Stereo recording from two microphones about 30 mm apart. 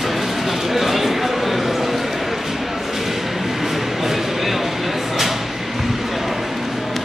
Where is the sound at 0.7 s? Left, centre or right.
Centre.